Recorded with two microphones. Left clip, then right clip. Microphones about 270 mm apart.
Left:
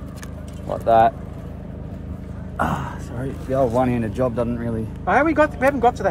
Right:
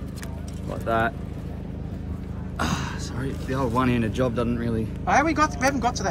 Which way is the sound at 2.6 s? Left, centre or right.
Centre.